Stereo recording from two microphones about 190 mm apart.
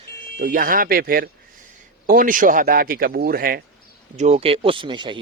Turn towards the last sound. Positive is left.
turn(degrees=-25)  # may be behind; listen again after turning